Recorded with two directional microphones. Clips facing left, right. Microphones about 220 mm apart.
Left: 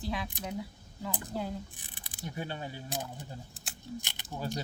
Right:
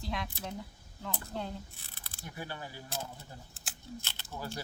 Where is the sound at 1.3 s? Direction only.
5° left (ahead or behind).